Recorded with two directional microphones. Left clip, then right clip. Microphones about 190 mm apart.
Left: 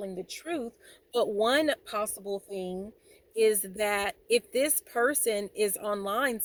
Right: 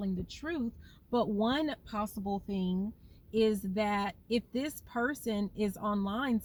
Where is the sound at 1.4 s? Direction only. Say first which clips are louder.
Left 7 dB; 20° left (ahead or behind).